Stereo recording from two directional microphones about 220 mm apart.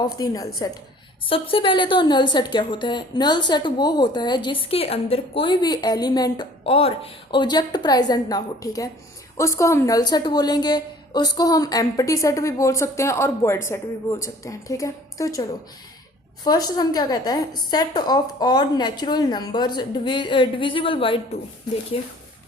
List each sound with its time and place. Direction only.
0.1 s a woman's voice: 15° left (ahead or behind)